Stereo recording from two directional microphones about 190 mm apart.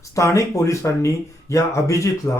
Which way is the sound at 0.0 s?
15° left (ahead or behind).